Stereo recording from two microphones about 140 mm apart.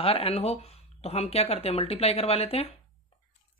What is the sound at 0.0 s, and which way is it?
Speech, 45° left (ahead or behind).